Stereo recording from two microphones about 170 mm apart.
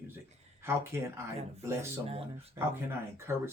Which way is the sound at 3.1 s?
15° right (ahead or behind).